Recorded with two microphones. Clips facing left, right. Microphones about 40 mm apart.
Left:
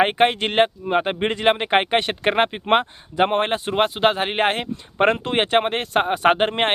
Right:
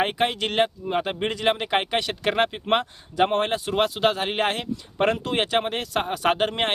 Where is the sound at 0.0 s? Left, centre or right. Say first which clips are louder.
Left 6 dB; left.